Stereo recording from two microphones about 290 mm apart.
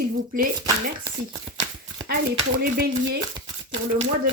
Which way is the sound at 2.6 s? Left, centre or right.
Right.